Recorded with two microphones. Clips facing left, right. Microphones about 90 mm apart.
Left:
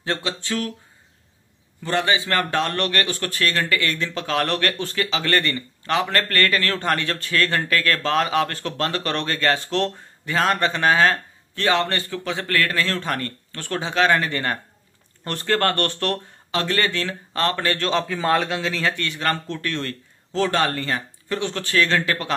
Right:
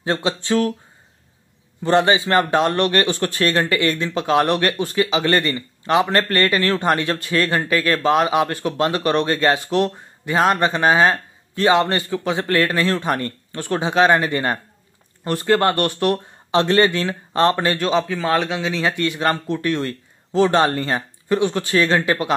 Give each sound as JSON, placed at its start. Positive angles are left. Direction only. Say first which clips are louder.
{"t": 0.0, "sound": "a man's voice", "louder": "right 5 dB", "side_deg": -20}
{"t": 1.8, "sound": "a man's voice", "louder": "right 6 dB", "side_deg": -25}
{"t": 16.5, "sound": "a man's voice", "louder": "right 7 dB", "side_deg": -25}
{"t": 17.7, "sound": "a man's voice", "louder": "right 3 dB", "side_deg": -5}
{"t": 18.7, "sound": "speech", "louder": "right 4 dB", "side_deg": -15}